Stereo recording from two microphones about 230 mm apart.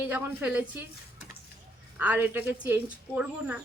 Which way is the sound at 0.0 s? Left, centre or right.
Centre.